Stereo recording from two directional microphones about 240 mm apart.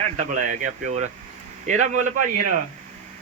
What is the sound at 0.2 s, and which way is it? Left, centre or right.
A man's voice, right.